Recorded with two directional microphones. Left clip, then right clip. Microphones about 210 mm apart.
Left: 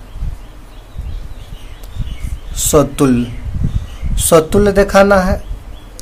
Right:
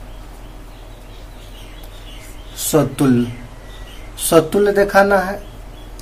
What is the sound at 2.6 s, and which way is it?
Speech, 40° left (ahead or behind).